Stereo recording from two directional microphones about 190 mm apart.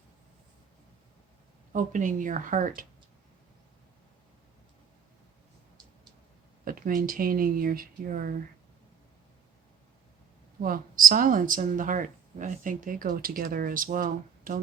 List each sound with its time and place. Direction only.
1.7 s speech: 40° right (ahead or behind)
6.7 s speech: 50° right (ahead or behind)
10.6 s speech: 45° right (ahead or behind)